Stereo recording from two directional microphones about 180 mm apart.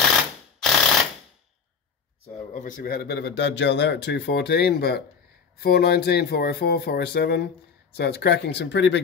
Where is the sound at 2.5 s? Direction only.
45° left (ahead or behind).